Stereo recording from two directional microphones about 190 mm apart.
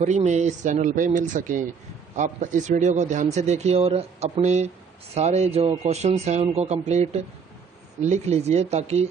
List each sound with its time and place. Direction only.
0.0 s speech: 40° right (ahead or behind)